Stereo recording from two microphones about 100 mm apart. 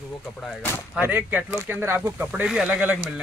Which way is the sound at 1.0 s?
20° right (ahead or behind).